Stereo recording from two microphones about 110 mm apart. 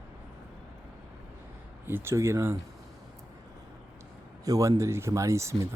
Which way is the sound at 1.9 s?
20° right (ahead or behind).